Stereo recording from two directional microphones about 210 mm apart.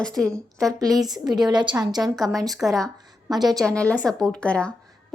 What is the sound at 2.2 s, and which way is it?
Speech, centre (ahead or behind).